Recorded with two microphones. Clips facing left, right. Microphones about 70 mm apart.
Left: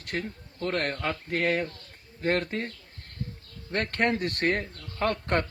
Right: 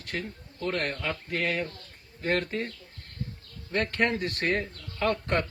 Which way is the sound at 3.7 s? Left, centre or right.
Left.